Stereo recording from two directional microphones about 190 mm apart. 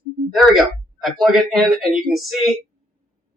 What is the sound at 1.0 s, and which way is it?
Speech, centre (ahead or behind).